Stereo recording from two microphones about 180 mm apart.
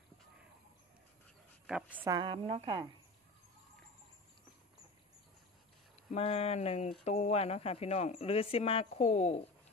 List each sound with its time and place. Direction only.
1.7 s a woman's voice: 5° right (ahead or behind)
2.1 s a woman's voice: 30° right (ahead or behind)
6.1 s speech: 35° left (ahead or behind)